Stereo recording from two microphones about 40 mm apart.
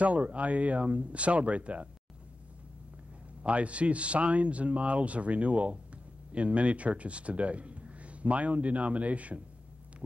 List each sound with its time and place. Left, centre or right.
0.0 s speech: right
3.4 s speech: right